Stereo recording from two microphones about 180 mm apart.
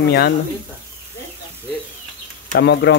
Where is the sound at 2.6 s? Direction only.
70° left (ahead or behind).